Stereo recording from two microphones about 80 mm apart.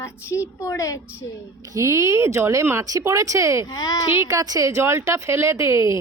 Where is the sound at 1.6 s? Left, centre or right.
Right.